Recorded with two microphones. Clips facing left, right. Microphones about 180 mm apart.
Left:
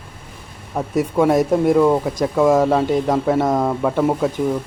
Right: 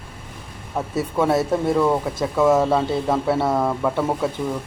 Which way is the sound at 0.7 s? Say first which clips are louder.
Left 4 dB; 15° left (ahead or behind).